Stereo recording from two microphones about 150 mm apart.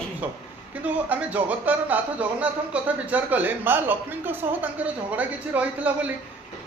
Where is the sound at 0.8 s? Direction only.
10° right (ahead or behind).